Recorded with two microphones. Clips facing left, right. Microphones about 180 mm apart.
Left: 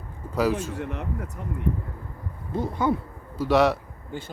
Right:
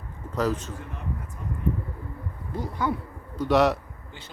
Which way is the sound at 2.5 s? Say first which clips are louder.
Left 4 dB; 25° left (ahead or behind).